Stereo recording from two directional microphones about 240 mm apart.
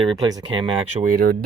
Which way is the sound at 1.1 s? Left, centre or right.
Right.